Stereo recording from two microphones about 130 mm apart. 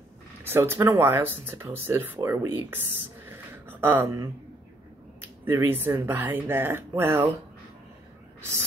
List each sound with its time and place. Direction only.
0.4 s speech: 20° right (ahead or behind)